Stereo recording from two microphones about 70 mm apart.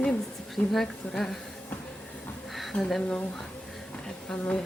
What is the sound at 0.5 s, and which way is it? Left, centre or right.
Speech, centre.